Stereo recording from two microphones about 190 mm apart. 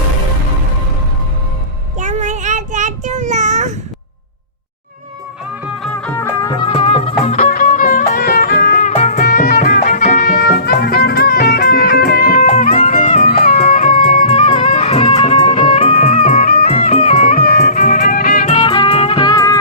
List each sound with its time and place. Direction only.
2.0 s child singing: 40° right (ahead or behind)
5.8 s music: 5° left (ahead or behind); by 7.3 s 30° left (ahead or behind)
7.3 s music: 45° left (ahead or behind)
12.6 s music: 30° left (ahead or behind)
13.6 s music: 45° left (ahead or behind)
14.3 s music: 30° left (ahead or behind); by 16.6 s 50° left (ahead or behind)
16.6 s music: 30° left (ahead or behind)
17.3 s music: 50° left (ahead or behind)
18.4 s music: 30° left (ahead or behind)